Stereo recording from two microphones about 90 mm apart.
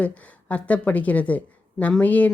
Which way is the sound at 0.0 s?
15° left (ahead or behind).